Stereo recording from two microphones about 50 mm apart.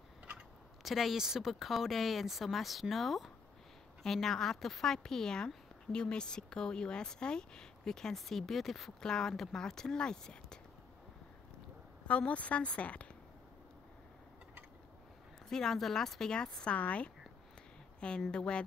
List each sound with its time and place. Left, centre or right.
0.8 s speech: centre
12.1 s a woman's voice: left
15.5 s speech: centre
16.7 s a woman's voice: left
18.3 s a woman's voice: centre